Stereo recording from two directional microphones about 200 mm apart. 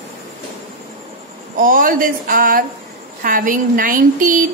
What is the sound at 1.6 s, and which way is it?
Speech, 45° right (ahead or behind).